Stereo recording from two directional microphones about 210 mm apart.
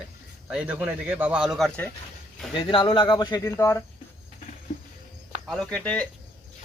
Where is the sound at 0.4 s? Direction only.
5° right (ahead or behind).